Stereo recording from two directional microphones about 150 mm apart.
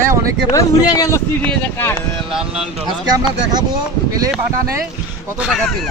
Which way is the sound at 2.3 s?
5° right (ahead or behind).